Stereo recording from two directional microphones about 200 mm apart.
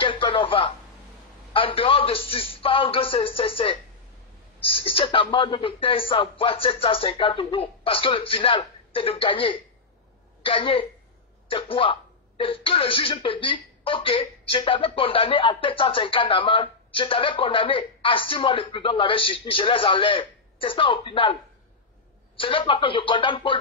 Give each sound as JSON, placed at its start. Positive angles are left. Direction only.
{"t": 0.0, "sound": "radio", "side_deg": 25}
{"t": 1.5, "sound": "speech", "side_deg": 25}
{"t": 22.4, "sound": "speech", "side_deg": 25}